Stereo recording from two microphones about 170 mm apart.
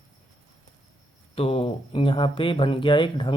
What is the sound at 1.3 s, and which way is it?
Speech, 35° left (ahead or behind).